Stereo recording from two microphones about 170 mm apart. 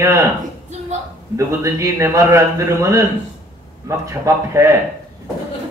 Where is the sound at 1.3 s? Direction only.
20° right (ahead or behind).